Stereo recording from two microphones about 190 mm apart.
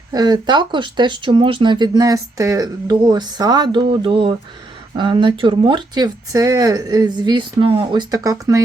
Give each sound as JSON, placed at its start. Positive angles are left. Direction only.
{"t": 0.1, "sound": "speech", "side_deg": -20}